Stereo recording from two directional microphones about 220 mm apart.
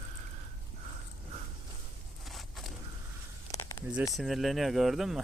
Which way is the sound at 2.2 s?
Centre (ahead or behind).